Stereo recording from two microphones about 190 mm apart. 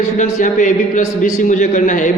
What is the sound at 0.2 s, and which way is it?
A man's voice, 40° left (ahead or behind).